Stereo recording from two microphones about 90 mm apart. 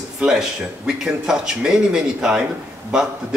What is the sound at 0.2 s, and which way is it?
A man's voice, 5° right (ahead or behind).